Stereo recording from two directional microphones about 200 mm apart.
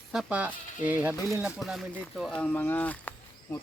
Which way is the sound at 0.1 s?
5° right (ahead or behind).